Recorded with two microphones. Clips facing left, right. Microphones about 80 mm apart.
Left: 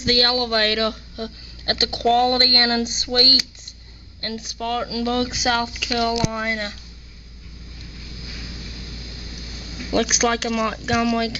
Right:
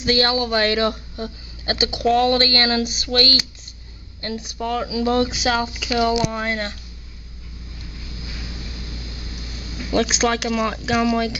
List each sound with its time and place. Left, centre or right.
0.0 s speech: centre
2.0 s speech: centre
3.1 s speech: centre
4.2 s speech: centre
5.3 s speech: centre
5.6 s speech: centre
6.3 s speech: centre
10.0 s speech: centre